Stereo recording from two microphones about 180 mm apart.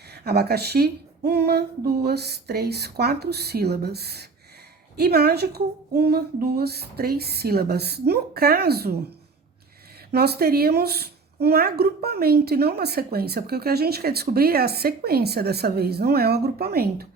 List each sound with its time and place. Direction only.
0.1 s speech: 65° right (ahead or behind)
10.1 s speech: 60° right (ahead or behind)